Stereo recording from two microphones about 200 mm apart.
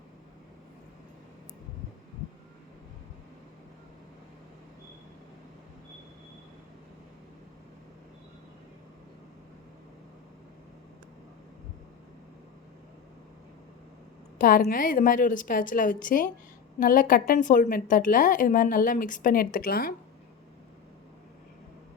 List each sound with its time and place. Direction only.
14.3 s a woman's voice: 45° left (ahead or behind)